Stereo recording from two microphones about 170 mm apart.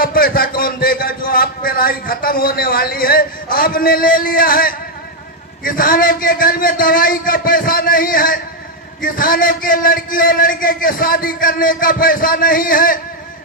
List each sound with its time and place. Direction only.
0.0 s a man's voice: 60° left (ahead or behind)